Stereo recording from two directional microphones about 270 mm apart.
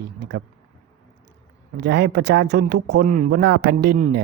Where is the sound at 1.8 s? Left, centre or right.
Right.